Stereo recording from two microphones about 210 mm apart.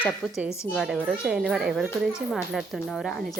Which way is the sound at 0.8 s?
5° right (ahead or behind).